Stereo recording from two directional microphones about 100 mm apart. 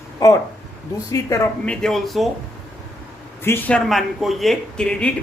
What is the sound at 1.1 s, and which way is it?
Speech, 35° left (ahead or behind).